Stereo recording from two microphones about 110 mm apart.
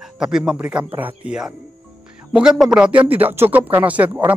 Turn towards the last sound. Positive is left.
turn(degrees=-15)  # may be behind; listen again after turning